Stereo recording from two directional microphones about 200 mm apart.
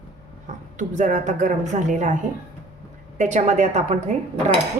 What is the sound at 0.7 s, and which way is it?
A woman's voice, 40° right (ahead or behind).